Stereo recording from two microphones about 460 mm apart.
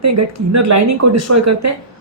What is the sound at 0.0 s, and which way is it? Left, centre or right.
A woman's voice, right.